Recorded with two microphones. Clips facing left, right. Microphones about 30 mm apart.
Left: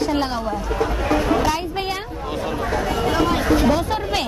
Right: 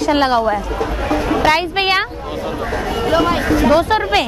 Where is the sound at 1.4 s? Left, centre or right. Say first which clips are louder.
Right 7 dB; right.